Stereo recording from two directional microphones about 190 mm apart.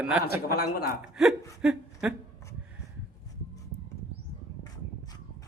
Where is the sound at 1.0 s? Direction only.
Centre (ahead or behind).